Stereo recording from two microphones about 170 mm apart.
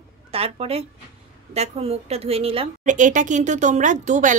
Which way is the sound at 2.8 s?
50° right (ahead or behind).